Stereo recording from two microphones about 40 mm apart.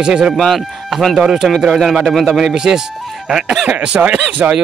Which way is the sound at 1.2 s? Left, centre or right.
Centre.